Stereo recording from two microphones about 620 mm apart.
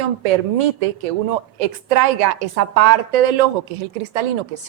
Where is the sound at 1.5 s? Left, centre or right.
Right.